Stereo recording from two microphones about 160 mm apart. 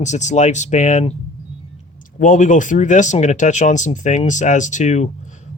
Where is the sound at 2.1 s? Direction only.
55° left (ahead or behind).